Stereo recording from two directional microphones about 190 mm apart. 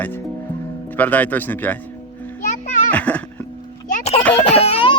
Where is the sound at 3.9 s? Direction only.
35° left (ahead or behind).